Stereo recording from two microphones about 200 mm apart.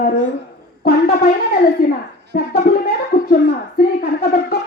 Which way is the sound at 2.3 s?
45° left (ahead or behind).